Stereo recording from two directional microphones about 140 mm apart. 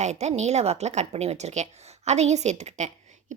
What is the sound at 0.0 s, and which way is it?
A woman's voice, 55° right (ahead or behind).